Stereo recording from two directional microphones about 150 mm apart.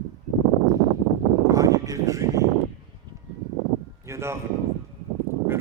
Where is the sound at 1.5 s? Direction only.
20° right (ahead or behind).